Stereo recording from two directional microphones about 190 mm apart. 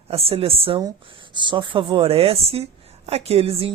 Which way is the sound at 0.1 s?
30° right (ahead or behind).